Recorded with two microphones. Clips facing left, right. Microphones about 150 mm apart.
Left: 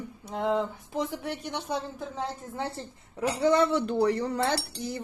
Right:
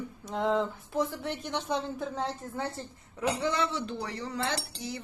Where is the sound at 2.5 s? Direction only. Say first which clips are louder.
Left 1 dB; 25° left (ahead or behind).